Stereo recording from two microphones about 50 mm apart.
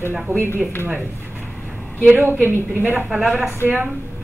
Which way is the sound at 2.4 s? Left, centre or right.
Right.